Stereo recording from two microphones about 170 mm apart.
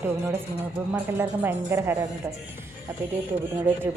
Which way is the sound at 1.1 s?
15° right (ahead or behind).